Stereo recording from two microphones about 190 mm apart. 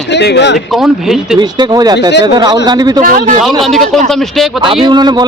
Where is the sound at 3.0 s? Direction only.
45° right (ahead or behind).